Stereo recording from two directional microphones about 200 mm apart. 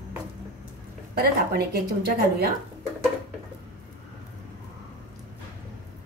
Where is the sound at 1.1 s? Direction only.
50° right (ahead or behind).